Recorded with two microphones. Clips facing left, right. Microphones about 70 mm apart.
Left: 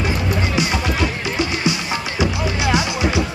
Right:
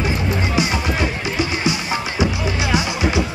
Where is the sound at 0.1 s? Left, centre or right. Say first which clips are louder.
Even; right.